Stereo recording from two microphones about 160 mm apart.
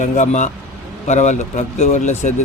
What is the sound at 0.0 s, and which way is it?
Speech, 50° left (ahead or behind).